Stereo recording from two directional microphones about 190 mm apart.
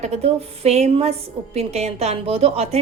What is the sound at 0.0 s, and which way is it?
A woman's voice, 35° right (ahead or behind).